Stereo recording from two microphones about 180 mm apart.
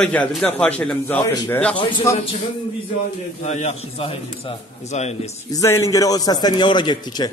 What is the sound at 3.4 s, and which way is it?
A man's voice, 40° left (ahead or behind).